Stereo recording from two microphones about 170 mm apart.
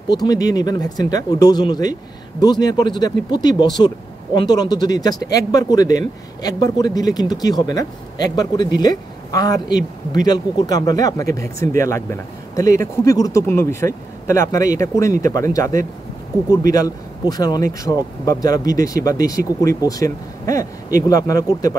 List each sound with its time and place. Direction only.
0.1 s speech: 25° left (ahead or behind)
17.3 s speech: 20° left (ahead or behind)